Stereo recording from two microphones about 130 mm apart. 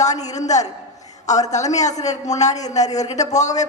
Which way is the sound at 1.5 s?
65° left (ahead or behind).